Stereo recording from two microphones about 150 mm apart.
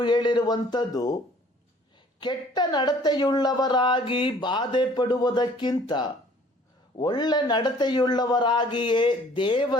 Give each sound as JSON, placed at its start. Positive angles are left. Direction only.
{"t": 0.0, "sound": "speech", "side_deg": 30}
{"t": 2.2, "sound": "speech", "side_deg": 25}